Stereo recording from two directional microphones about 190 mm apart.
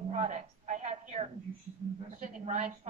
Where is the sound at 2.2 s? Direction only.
40° right (ahead or behind).